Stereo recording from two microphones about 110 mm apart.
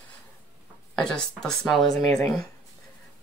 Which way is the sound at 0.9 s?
5° left (ahead or behind).